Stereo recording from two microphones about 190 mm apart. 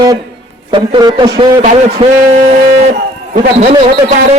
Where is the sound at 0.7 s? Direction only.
25° right (ahead or behind).